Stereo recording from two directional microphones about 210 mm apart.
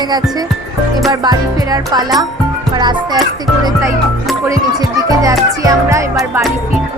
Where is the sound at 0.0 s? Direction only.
20° right (ahead or behind).